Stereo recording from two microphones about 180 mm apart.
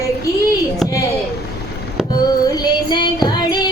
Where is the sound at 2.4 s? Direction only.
20° left (ahead or behind).